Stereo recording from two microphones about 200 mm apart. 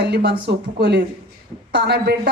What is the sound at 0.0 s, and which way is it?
A man's voice, 55° right (ahead or behind).